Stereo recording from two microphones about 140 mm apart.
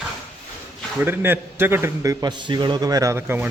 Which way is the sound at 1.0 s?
15° right (ahead or behind).